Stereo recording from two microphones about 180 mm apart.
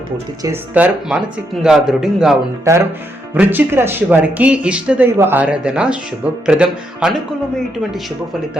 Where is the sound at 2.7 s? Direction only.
15° right (ahead or behind).